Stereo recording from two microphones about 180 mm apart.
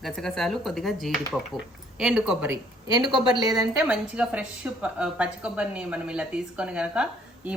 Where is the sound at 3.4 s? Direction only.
20° right (ahead or behind).